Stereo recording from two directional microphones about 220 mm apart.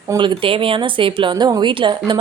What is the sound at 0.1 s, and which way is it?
A woman's voice, 20° right (ahead or behind).